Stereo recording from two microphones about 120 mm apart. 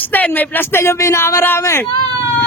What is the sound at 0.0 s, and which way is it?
A man's voice, 15° left (ahead or behind).